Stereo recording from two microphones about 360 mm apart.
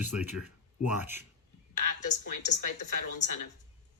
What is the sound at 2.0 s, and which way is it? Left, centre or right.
Speech, left.